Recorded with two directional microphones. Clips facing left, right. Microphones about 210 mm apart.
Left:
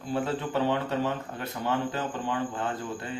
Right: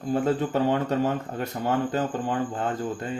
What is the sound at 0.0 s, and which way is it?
A man's voice, 45° right (ahead or behind).